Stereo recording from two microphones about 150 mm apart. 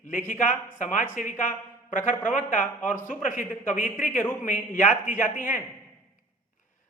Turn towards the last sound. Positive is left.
turn(degrees=60)  # may be behind; listen again after turning